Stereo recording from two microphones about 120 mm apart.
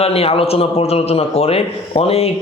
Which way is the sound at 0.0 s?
55° left (ahead or behind).